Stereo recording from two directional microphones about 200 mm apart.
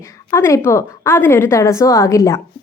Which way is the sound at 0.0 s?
15° left (ahead or behind).